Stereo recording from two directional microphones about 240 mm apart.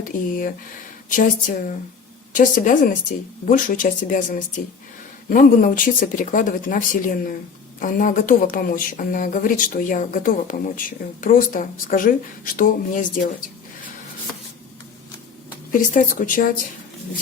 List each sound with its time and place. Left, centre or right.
0.0 s speech: left
15.9 s speech: left